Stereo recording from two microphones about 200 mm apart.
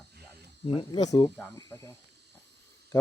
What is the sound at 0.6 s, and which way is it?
Speech, 25° left (ahead or behind).